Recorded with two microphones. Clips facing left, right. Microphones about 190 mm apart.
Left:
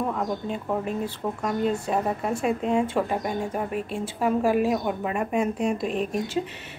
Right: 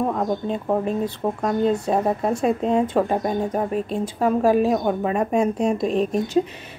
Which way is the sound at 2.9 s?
40° right (ahead or behind).